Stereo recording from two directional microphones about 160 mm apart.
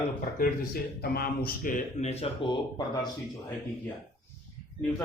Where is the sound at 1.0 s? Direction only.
70° left (ahead or behind); by 3.1 s 25° left (ahead or behind).